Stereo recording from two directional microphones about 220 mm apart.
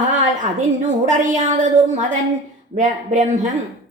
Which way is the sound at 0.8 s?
35° right (ahead or behind).